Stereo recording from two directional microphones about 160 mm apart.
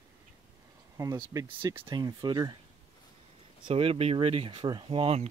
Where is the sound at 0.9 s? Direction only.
20° right (ahead or behind).